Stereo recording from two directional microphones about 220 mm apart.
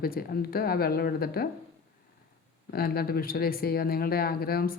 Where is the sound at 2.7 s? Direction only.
45° left (ahead or behind).